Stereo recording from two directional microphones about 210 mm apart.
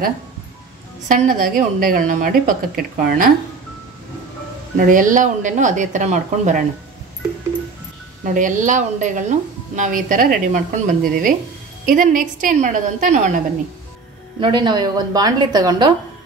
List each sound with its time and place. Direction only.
1.0 s a woman's voice: 40° right (ahead or behind)
4.7 s a woman's voice: 40° right (ahead or behind)
8.4 s a woman's voice: 40° right (ahead or behind)
14.4 s a woman's voice: 20° right (ahead or behind)